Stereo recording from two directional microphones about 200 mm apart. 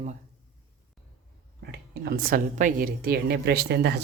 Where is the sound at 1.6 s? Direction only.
55° right (ahead or behind).